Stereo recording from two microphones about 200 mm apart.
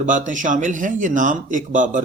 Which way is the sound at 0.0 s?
40° right (ahead or behind).